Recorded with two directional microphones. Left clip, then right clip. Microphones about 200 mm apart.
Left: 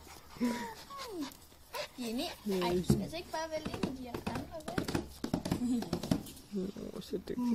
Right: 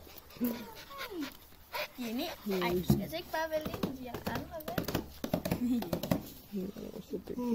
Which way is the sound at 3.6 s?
45° right (ahead or behind).